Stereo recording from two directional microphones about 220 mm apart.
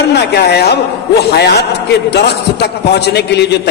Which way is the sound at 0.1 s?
50° left (ahead or behind).